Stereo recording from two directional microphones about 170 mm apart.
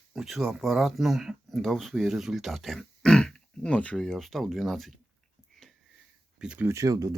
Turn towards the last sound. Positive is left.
turn(degrees=-20)  # may be behind; listen again after turning